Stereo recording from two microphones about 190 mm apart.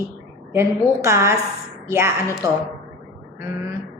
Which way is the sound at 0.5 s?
15° right (ahead or behind).